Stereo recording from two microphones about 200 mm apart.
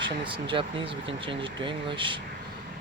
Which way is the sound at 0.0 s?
25° right (ahead or behind).